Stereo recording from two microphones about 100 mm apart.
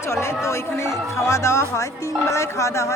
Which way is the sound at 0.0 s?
25° left (ahead or behind).